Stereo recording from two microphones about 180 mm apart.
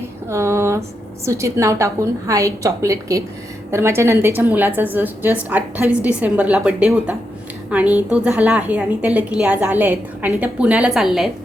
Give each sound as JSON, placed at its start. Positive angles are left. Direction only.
{"t": 0.3, "sound": "a woman's voice", "side_deg": -15}